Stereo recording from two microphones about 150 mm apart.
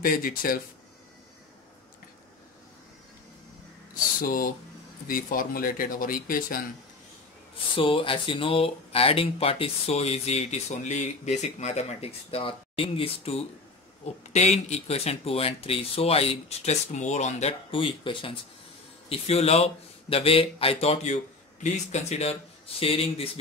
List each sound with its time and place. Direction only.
0.0 s speech: 75° left (ahead or behind)
3.9 s a sound: 70° left (ahead or behind)
5.0 s speech: 70° left (ahead or behind)
7.7 s speech: 35° left (ahead or behind)